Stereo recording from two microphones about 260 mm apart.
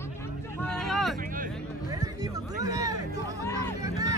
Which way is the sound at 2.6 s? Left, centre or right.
Centre.